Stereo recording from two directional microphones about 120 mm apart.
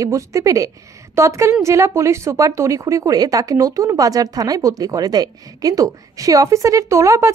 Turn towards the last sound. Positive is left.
turn(degrees=-25)  # may be behind; listen again after turning